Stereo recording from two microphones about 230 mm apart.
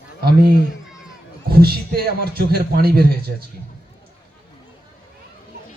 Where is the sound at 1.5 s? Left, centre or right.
Right.